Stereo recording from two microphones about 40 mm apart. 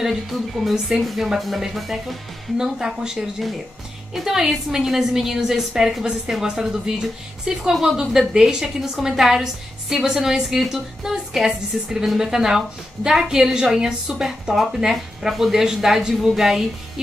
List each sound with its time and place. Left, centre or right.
0.0 s speech: centre
2.5 s a woman's voice: centre
14.5 s a woman's voice: centre